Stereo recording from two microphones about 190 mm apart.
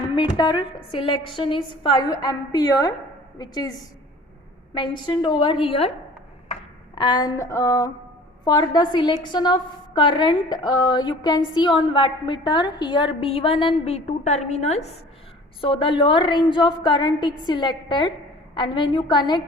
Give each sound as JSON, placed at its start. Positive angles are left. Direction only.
{"t": 0.2, "sound": "a woman's voice", "side_deg": 20}
{"t": 4.8, "sound": "a woman's voice", "side_deg": 25}
{"t": 6.9, "sound": "a woman's voice", "side_deg": 25}